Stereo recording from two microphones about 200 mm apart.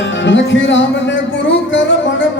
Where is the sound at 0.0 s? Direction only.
65° left (ahead or behind).